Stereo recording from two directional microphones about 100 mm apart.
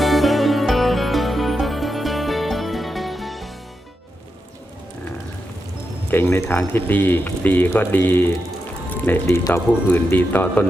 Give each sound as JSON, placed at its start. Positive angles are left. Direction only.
{"t": 0.0, "sound": "music", "side_deg": 0}
{"t": 6.1, "sound": "speech", "side_deg": 20}
{"t": 8.9, "sound": "music", "side_deg": 20}
{"t": 9.2, "sound": "speech", "side_deg": 30}